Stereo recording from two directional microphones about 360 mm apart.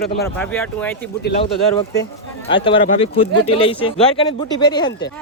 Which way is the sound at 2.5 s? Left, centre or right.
Centre.